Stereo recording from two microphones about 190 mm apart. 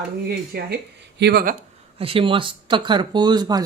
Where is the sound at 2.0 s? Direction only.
30° right (ahead or behind).